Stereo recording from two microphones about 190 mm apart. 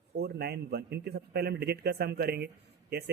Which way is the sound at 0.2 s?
55° right (ahead or behind).